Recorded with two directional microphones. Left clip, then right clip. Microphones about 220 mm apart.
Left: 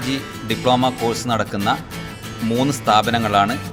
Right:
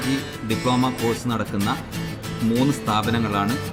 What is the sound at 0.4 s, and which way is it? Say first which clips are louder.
Speech: left 6 dB; 40° left (ahead or behind).